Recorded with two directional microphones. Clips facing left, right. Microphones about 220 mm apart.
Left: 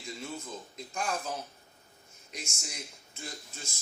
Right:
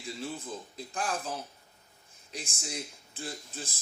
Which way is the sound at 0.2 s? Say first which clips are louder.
Right 3 dB; 35° right (ahead or behind).